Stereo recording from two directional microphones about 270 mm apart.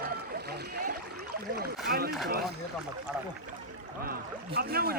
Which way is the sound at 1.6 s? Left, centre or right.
Right.